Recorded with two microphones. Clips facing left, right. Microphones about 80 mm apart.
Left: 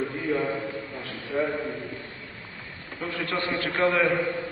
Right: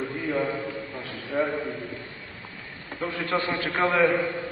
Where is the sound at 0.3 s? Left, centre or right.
Centre.